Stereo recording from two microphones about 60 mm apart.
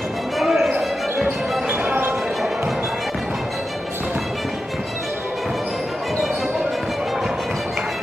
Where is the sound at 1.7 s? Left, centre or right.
Right.